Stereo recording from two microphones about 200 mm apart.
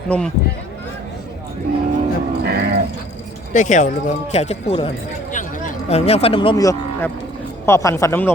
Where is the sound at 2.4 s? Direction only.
50° right (ahead or behind).